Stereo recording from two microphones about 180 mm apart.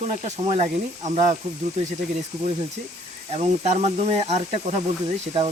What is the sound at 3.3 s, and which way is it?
Speech, 35° right (ahead or behind).